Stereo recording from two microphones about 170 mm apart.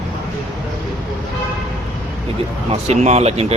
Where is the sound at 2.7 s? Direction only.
40° right (ahead or behind).